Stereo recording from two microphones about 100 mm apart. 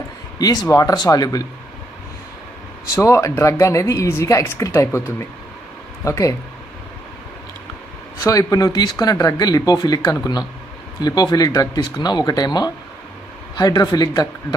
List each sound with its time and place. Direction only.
0.4 s speech: 40° left (ahead or behind)
2.9 s speech: 30° left (ahead or behind)
8.2 s speech: 35° left (ahead or behind)